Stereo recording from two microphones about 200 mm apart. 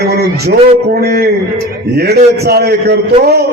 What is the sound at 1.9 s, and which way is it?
A man's voice, 55° right (ahead or behind).